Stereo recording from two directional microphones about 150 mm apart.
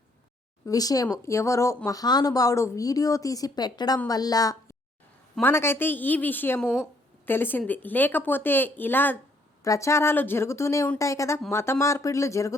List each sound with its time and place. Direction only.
0.6 s a woman's voice: 25° left (ahead or behind)